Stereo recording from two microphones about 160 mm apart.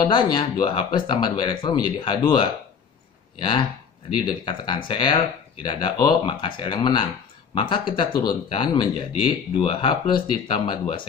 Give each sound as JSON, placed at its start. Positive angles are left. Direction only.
{"t": 0.0, "sound": "speech", "side_deg": 30}